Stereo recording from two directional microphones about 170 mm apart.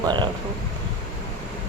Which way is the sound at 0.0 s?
25° right (ahead or behind).